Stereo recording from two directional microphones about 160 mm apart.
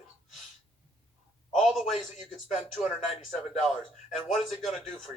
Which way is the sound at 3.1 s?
45° left (ahead or behind).